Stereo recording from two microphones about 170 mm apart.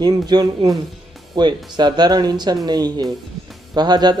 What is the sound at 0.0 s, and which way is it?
Speech, 25° right (ahead or behind).